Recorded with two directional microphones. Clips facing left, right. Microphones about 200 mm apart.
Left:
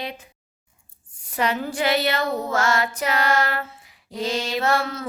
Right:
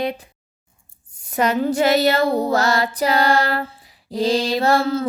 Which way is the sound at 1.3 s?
45° right (ahead or behind).